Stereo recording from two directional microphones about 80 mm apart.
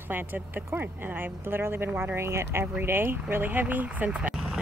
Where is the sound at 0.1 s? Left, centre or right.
Right.